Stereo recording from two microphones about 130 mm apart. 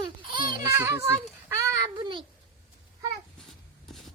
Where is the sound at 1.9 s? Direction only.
40° right (ahead or behind).